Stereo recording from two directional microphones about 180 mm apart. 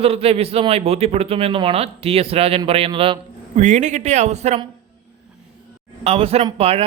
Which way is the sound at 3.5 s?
40° right (ahead or behind).